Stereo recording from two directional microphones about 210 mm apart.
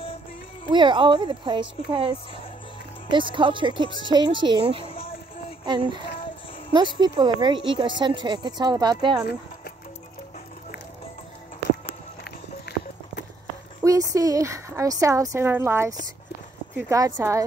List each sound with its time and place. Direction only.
0.7 s a woman's voice: 20° right (ahead or behind)
4.8 s a sound: 25° left (ahead or behind)
5.7 s a woman's voice: 20° right (ahead or behind)
12.3 s walk: 50° left (ahead or behind)
13.8 s a woman's voice: 15° right (ahead or behind)